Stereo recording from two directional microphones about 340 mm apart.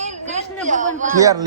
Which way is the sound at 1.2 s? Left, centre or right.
Centre.